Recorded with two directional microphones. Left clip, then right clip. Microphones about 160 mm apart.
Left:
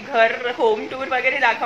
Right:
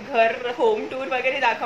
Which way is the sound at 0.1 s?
10° left (ahead or behind).